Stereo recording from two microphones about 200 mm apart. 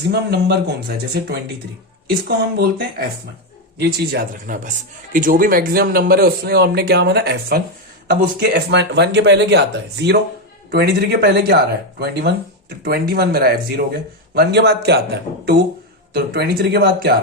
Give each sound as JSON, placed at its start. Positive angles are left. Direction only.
{"t": 0.1, "sound": "speech", "side_deg": -55}